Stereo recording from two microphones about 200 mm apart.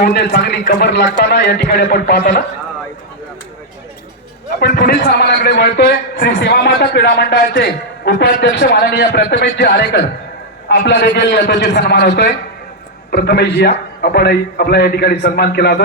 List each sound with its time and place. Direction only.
0.0 s a man's voice: 55° left (ahead or behind)
4.6 s a man's voice: 55° left (ahead or behind)